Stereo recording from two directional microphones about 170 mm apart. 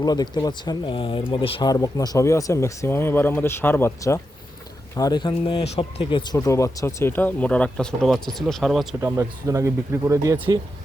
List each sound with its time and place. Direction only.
0.0 s speech: 20° left (ahead or behind); by 9.0 s centre (ahead or behind)
9.0 s speech: 15° right (ahead or behind)